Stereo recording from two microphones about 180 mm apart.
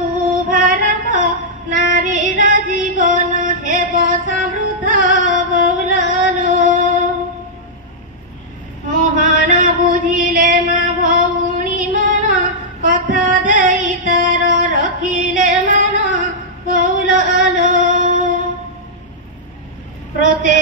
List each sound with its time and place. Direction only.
0.5 s female singing: 50° right (ahead or behind)
8.9 s a sound: 45° right (ahead or behind)
17.1 s singing: 45° right (ahead or behind)